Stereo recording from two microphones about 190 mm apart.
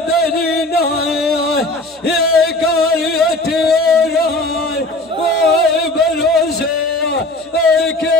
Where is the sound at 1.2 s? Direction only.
55° left (ahead or behind).